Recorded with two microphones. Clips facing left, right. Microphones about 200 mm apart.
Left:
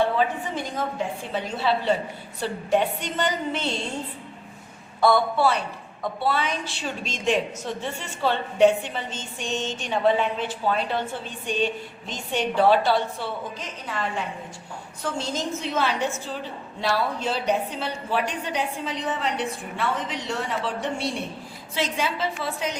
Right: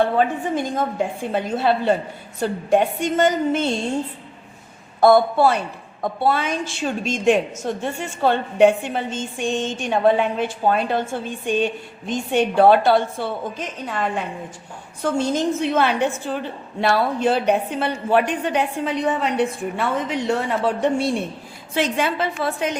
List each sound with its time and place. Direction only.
0.2 s a woman's voice: 50° right (ahead or behind)
4.9 s a woman's voice: 50° right (ahead or behind)